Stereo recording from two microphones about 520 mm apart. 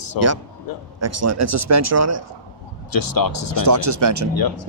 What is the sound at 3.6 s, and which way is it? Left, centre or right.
Speech, right.